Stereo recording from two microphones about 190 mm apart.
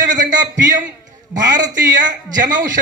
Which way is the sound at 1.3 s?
40° right (ahead or behind).